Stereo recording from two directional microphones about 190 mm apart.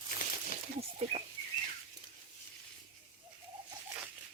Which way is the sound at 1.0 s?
35° right (ahead or behind).